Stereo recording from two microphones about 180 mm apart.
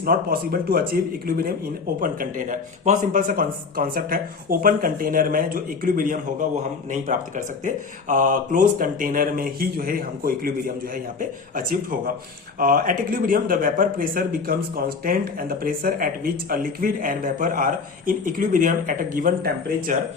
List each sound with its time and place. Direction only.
0.0 s speech: 55° right (ahead or behind)